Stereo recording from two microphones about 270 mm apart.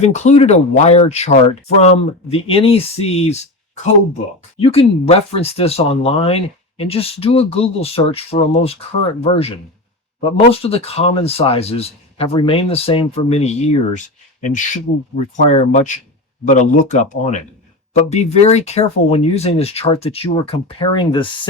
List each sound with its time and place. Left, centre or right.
0.0 s speech: left
4.6 s speech: left